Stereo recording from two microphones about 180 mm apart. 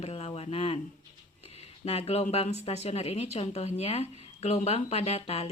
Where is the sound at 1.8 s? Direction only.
35° left (ahead or behind).